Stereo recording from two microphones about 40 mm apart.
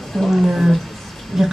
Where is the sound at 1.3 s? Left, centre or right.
Centre.